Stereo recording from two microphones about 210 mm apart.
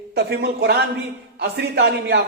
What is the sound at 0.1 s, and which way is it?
A man's voice, 50° right (ahead or behind).